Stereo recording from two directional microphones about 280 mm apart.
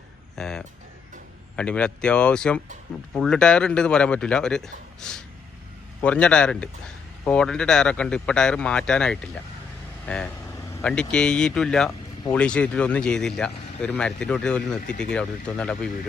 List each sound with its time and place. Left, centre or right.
0.3 s speech: centre